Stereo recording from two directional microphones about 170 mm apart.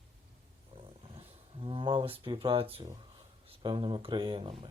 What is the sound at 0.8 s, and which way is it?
Roaring cats, 35° right (ahead or behind).